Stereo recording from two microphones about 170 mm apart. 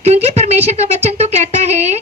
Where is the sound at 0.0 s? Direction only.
40° right (ahead or behind).